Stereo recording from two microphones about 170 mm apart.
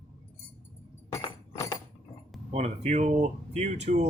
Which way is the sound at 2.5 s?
40° right (ahead or behind).